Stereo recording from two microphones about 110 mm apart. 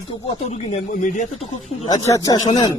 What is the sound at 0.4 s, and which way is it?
Speech, 90° left.